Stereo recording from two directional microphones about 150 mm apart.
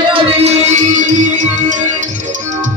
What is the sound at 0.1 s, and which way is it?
Music, 45° right (ahead or behind).